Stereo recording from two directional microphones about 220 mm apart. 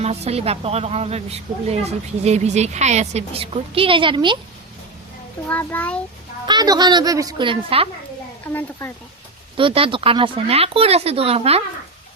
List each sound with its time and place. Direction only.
0.0 s a woman's voice: 30° right (ahead or behind)
5.5 s a child's voice: 5° left (ahead or behind)
6.5 s a woman's voice: 20° right (ahead or behind)
9.6 s a woman's voice: 25° right (ahead or behind)